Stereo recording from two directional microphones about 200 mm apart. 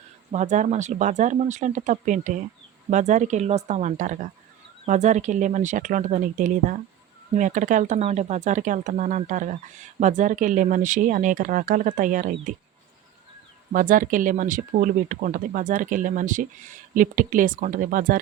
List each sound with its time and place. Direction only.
0.3 s speech: 35° right (ahead or behind)
13.7 s speech: 40° right (ahead or behind)